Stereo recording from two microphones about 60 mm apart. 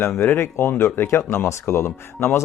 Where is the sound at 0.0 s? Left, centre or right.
Left.